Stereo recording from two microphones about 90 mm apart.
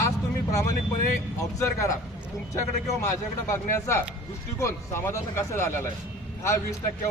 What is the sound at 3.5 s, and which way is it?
Speech, 35° left (ahead or behind).